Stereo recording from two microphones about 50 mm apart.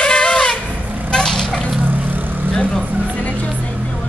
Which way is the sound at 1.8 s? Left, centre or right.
Right.